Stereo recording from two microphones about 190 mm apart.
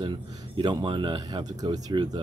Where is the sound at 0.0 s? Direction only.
25° right (ahead or behind).